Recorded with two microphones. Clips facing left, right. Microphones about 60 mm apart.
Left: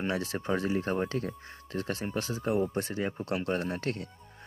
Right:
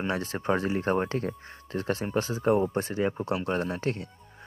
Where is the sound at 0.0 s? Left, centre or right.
Right.